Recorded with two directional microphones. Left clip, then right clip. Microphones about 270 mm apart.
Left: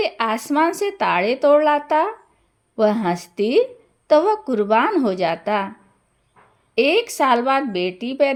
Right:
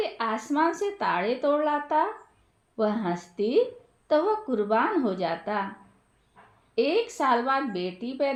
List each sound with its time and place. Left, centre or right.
0.0 s speech: left
6.7 s speech: left